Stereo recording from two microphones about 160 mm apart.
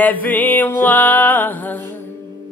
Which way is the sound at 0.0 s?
10° left (ahead or behind).